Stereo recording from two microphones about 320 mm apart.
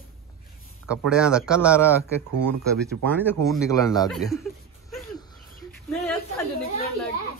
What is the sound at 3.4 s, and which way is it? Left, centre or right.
Speech, centre.